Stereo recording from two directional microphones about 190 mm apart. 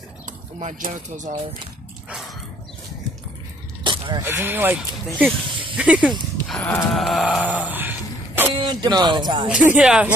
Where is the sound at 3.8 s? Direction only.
25° right (ahead or behind).